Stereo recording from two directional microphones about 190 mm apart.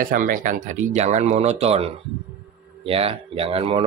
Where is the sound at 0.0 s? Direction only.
45° right (ahead or behind).